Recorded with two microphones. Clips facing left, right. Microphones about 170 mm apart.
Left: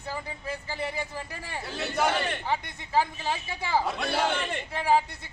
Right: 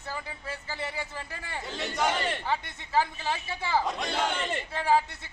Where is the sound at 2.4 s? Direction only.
15° left (ahead or behind).